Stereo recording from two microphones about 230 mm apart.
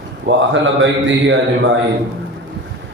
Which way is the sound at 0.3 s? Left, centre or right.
Right.